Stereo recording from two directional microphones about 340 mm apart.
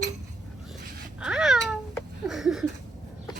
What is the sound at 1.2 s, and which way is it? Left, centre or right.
Babbling, centre.